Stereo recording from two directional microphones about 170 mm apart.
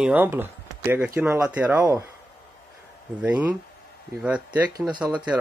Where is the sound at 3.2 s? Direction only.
10° right (ahead or behind).